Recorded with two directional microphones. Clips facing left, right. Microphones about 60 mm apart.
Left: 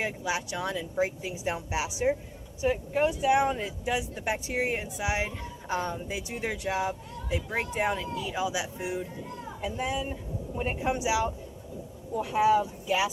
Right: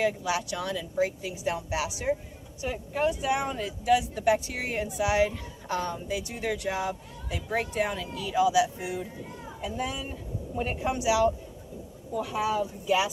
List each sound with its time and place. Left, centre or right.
0.0 s speech: left
12.5 s speech: centre